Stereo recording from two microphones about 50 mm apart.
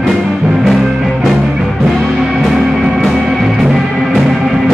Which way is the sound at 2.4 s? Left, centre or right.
Centre.